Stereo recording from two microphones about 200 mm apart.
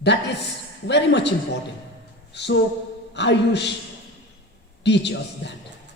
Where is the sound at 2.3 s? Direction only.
60° left (ahead or behind).